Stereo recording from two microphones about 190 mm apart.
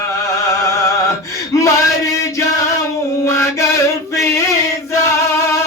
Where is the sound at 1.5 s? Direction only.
15° left (ahead or behind).